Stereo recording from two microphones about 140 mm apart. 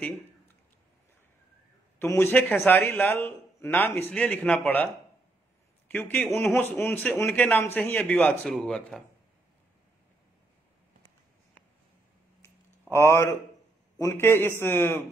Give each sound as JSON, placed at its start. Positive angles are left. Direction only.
{"t": 2.0, "sound": "a man's voice", "side_deg": 20}
{"t": 5.9, "sound": "a man's voice", "side_deg": 15}
{"t": 12.9, "sound": "a man's voice", "side_deg": 20}